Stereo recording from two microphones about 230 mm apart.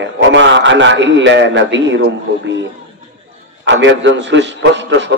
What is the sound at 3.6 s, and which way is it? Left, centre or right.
A man's voice, right.